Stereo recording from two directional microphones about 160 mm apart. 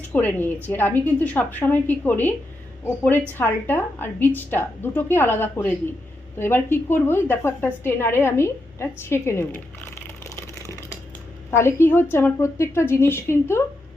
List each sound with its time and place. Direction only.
0.1 s a woman's voice: 10° left (ahead or behind)
11.5 s a woman's voice: 15° left (ahead or behind)